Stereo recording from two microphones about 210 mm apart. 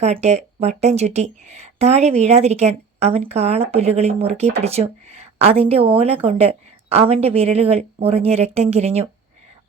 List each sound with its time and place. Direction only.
0.0 s a woman's voice: 30° right (ahead or behind)